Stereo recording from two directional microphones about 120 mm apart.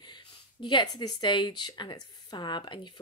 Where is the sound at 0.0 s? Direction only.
40° left (ahead or behind).